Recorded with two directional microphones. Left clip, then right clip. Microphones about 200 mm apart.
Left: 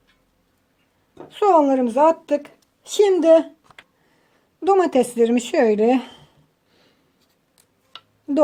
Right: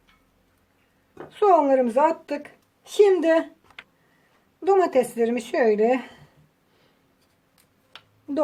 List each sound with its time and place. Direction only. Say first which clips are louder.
1.3 s a woman's voice: left 2 dB; 35° left (ahead or behind)
4.6 s a woman's voice: left 3 dB; 40° left (ahead or behind)